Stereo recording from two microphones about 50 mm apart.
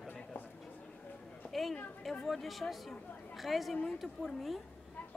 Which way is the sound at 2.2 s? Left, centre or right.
Centre.